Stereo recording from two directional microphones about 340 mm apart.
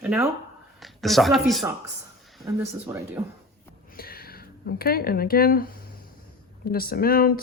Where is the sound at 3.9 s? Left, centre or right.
Left.